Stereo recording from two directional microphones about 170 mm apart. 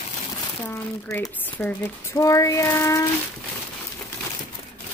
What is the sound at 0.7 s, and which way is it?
Speech, 15° left (ahead or behind).